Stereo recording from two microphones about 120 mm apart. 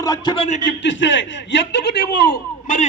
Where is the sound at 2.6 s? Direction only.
90° left.